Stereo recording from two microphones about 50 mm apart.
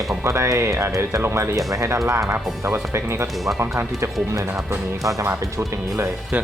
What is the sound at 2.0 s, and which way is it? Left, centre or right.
Speech, right.